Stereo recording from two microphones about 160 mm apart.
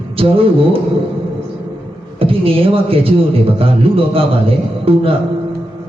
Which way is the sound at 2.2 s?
35° right (ahead or behind).